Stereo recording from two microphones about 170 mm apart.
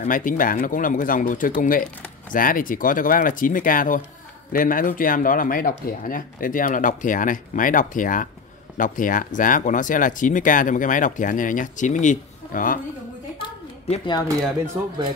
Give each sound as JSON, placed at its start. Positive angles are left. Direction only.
{"t": 0.0, "sound": "speech", "side_deg": 50}
{"t": 13.8, "sound": "speech", "side_deg": 40}